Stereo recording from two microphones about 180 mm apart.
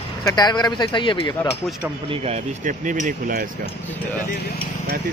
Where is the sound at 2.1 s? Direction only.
35° right (ahead or behind).